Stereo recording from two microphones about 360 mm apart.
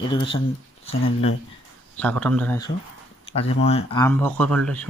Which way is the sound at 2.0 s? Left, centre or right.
Centre.